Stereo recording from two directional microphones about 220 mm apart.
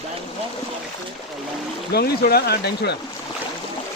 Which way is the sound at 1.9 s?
45° left (ahead or behind).